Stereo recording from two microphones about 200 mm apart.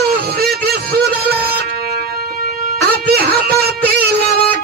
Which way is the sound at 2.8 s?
50° right (ahead or behind).